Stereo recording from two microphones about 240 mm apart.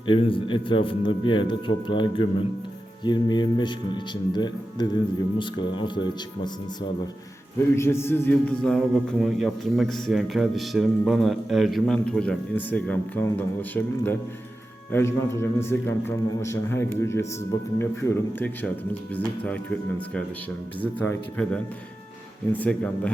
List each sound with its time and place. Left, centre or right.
0.1 s a man's voice: left
21.0 s a man's voice: centre